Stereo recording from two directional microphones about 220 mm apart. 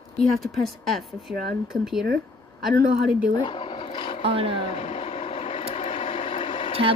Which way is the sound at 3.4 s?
20° left (ahead or behind).